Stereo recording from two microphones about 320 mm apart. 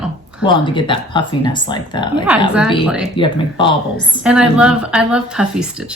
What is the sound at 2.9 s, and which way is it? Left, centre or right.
Speech, centre.